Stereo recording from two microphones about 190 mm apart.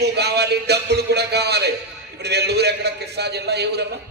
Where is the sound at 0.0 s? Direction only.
60° right (ahead or behind).